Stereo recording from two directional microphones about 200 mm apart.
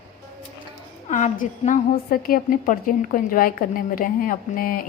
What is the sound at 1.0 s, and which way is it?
A woman's voice, 35° left (ahead or behind).